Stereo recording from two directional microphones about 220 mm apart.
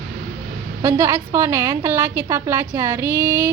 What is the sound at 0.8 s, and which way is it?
A woman's voice, 10° right (ahead or behind).